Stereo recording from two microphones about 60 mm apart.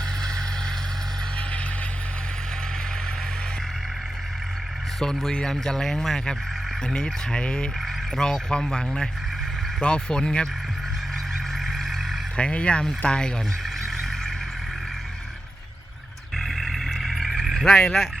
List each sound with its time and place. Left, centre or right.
4.9 s speech: centre
11.7 s vehicle: centre
12.4 s speech: centre
13.8 s vehicle: centre
16.4 s vehicle: centre
17.7 s speech: centre